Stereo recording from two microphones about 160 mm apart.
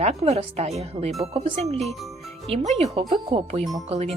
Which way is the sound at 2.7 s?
40° right (ahead or behind).